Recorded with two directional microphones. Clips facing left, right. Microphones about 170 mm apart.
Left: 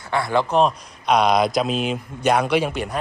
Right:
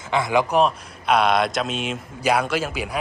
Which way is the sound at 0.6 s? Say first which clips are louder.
Left 1 dB; centre (ahead or behind).